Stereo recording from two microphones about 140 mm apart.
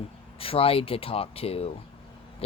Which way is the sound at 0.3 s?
40° left (ahead or behind).